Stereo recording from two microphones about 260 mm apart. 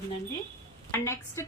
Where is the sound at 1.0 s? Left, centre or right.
Centre.